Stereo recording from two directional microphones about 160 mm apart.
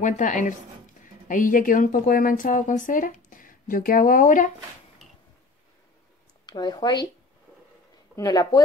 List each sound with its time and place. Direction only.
0.0 s speech: 50° left (ahead or behind)
6.4 s speech: 25° left (ahead or behind)
8.2 s speech: 25° left (ahead or behind)